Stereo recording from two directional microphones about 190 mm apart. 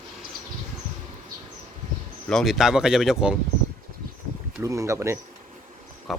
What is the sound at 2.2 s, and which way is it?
Speech, centre (ahead or behind).